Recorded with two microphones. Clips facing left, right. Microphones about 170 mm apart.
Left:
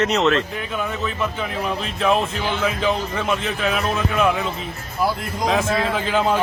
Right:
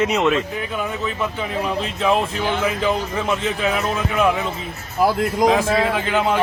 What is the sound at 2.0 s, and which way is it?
Speech, 15° right (ahead or behind).